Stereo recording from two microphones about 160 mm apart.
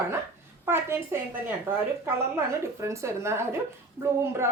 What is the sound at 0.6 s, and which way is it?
Speech, 15° right (ahead or behind).